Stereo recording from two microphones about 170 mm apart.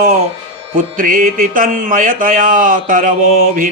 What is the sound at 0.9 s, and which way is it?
Speech, 55° right (ahead or behind).